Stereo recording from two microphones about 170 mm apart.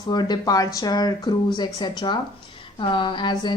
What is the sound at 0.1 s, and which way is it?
A woman's voice, 25° left (ahead or behind).